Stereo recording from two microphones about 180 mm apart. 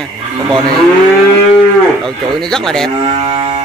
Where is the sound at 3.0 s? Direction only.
30° right (ahead or behind).